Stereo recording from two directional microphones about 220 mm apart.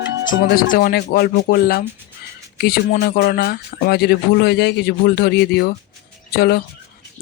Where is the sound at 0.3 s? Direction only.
40° left (ahead or behind).